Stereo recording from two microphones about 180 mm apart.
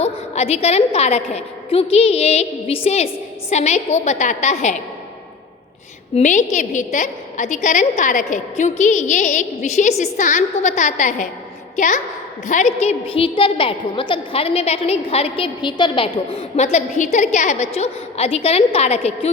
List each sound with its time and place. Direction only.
0.0 s a woman's voice: 35° left (ahead or behind)
6.1 s a woman's voice: 40° left (ahead or behind)